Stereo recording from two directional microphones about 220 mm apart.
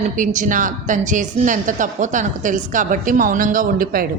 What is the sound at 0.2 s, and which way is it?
A woman's voice, 35° right (ahead or behind).